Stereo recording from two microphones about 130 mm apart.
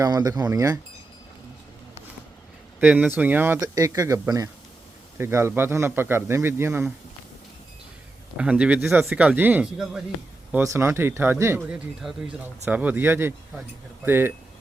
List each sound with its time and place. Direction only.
0.0 s a man's voice: 30° right (ahead or behind)
2.8 s speech: 5° right (ahead or behind)
3.6 s a man's voice: 25° right (ahead or behind)
8.4 s speech: 10° right (ahead or behind)
10.6 s a man's voice: 20° right (ahead or behind)
11.7 s speech: 10° right (ahead or behind)